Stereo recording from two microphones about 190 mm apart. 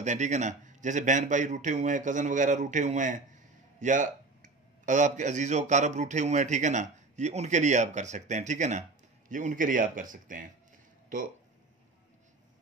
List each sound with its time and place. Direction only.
0.0 s a man's voice: 40° right (ahead or behind)